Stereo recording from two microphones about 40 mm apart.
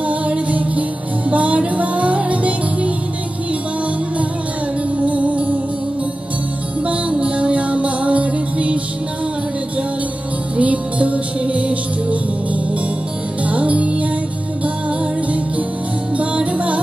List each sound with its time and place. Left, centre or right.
0.0 s music: right
4.9 s music: right
6.9 s music: right
10.6 s music: right
13.4 s music: right
16.2 s music: right